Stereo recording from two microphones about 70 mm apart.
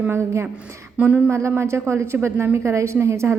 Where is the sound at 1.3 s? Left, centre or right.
Right.